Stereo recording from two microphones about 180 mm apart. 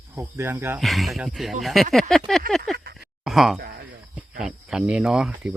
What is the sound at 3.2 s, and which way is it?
Speech, centre (ahead or behind).